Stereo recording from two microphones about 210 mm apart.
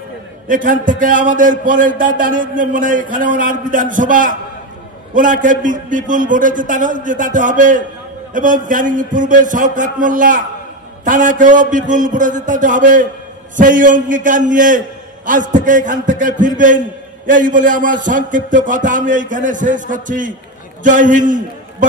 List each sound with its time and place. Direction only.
0.5 s a man's voice: 40° right (ahead or behind)